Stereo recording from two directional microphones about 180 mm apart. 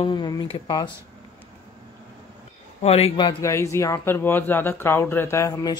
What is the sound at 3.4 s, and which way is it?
Speech, 15° left (ahead or behind).